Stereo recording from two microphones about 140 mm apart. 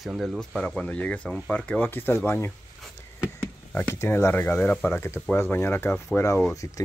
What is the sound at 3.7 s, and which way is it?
Speech, 15° left (ahead or behind).